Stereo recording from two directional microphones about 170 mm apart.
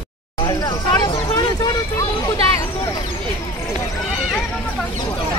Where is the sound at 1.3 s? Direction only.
20° left (ahead or behind).